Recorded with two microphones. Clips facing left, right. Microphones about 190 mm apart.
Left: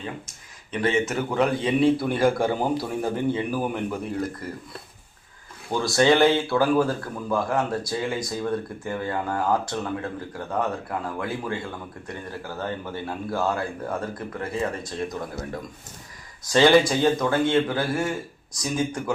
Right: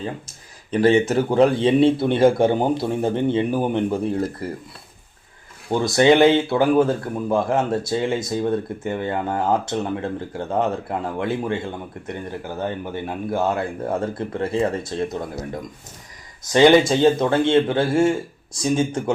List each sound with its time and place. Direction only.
0.7 s speech: 35° right (ahead or behind)
5.7 s speech: 20° right (ahead or behind)